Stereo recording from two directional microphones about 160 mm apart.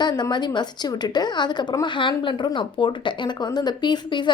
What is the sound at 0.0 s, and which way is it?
A woman's voice, 25° left (ahead or behind).